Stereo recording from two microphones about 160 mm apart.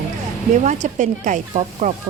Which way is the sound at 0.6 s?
50° right (ahead or behind).